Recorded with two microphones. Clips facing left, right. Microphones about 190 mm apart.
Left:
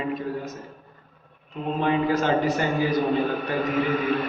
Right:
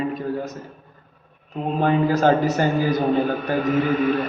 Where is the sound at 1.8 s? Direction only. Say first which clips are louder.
Right 4 dB; 40° right (ahead or behind).